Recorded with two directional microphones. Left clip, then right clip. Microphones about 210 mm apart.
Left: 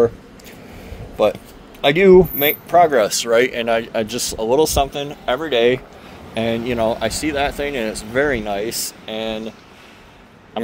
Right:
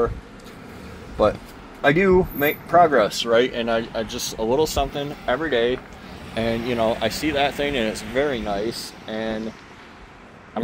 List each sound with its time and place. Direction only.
1.9 s speech: 70° left (ahead or behind); by 5.8 s 50° left (ahead or behind)
6.3 s speech: 25° left (ahead or behind); by 7.9 s 10° left (ahead or behind)
7.9 s speech: 30° left (ahead or behind)
8.3 s speech: 50° left (ahead or behind)